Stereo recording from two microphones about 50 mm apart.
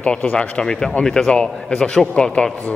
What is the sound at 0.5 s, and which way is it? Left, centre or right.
A man's voice, centre.